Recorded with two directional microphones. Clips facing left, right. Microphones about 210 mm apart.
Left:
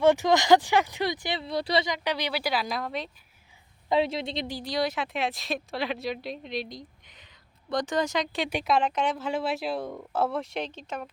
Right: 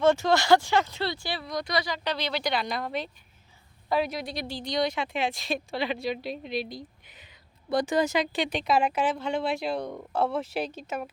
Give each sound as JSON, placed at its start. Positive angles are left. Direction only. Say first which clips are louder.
{"t": 0.0, "sound": "speech", "louder": "left 1 dB", "side_deg": 15}
{"t": 3.8, "sound": "a woman's voice", "louder": "left 2 dB", "side_deg": 25}
{"t": 4.5, "sound": "a woman's voice", "louder": "right 2 dB", "side_deg": 5}
{"t": 8.4, "sound": "speech", "louder": "even", "side_deg": 10}
{"t": 8.7, "sound": "speech", "louder": "right 1 dB", "side_deg": -10}
{"t": 9.1, "sound": "a woman's voice", "louder": "right 1 dB", "side_deg": 5}